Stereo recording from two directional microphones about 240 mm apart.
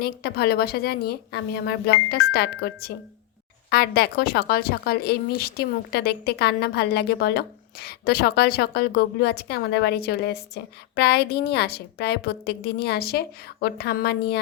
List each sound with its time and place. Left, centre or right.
0.0 s a woman's voice: left